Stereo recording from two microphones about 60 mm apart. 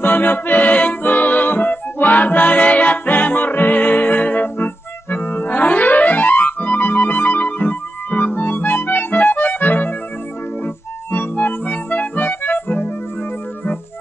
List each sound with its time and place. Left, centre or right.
0.0 s music: left